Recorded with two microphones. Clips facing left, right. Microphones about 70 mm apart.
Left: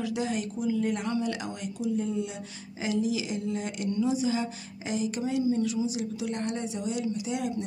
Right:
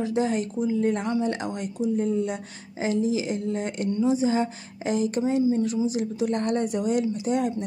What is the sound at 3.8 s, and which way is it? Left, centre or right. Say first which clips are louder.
Speech: right 4 dB; right.